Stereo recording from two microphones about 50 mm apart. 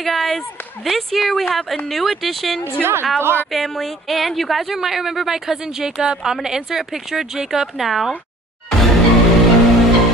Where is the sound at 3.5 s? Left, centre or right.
Centre.